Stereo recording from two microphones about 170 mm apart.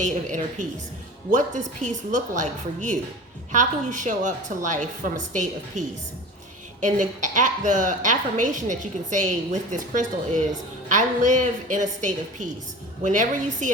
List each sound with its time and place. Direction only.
0.0 s a woman's voice: 45° right (ahead or behind)
6.8 s a woman's voice: 45° right (ahead or behind)